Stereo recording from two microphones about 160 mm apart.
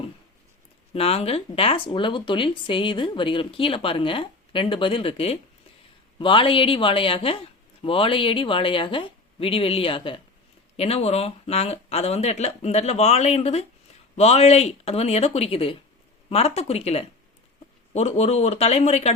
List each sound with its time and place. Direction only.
0.9 s speech: 40° left (ahead or behind)